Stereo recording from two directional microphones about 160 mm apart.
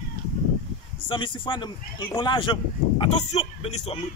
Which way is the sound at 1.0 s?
30° left (ahead or behind).